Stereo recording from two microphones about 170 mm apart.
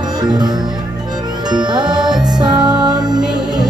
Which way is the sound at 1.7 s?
25° right (ahead or behind).